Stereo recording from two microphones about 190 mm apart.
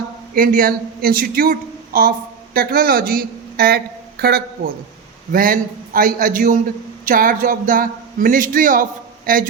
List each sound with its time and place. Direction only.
0.3 s a man's voice: 50° right (ahead or behind)